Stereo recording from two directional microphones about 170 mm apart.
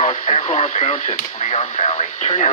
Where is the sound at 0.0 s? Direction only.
40° left (ahead or behind).